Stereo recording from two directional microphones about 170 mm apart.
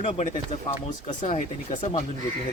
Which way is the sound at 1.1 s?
50° left (ahead or behind).